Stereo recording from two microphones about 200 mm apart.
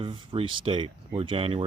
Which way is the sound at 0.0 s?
25° right (ahead or behind).